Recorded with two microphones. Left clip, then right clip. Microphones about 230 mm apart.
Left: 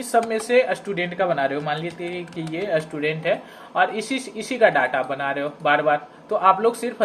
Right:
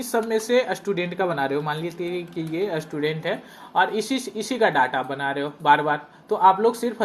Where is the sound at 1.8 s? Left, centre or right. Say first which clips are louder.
Right 1 dB; left.